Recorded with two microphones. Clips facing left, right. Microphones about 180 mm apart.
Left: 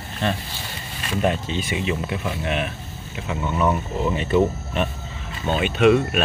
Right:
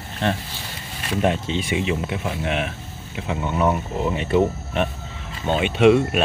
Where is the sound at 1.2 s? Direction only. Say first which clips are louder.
Right 1 dB; 20° right (ahead or behind).